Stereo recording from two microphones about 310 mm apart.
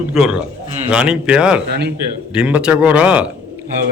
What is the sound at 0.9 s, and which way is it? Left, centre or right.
A man's voice, centre.